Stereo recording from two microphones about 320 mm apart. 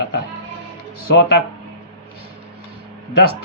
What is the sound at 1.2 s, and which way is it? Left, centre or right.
Speech, left.